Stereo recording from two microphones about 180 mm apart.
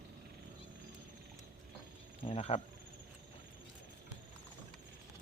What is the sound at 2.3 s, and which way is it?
Speech, 30° left (ahead or behind).